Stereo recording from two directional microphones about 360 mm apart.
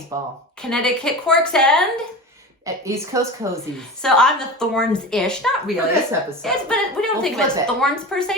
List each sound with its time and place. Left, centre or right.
0.1 s speech: centre
0.6 s a woman's voice: centre
2.6 s a woman's voice: centre